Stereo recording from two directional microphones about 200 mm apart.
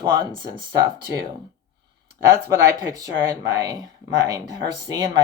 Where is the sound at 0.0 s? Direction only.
25° right (ahead or behind).